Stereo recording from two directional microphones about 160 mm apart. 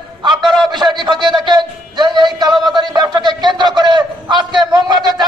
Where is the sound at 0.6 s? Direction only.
25° right (ahead or behind).